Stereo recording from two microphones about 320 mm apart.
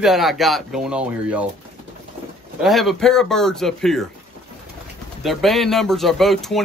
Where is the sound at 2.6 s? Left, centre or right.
Centre.